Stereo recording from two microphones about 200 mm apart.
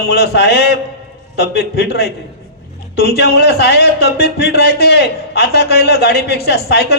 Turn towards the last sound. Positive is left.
turn(degrees=55)  # may be behind; listen again after turning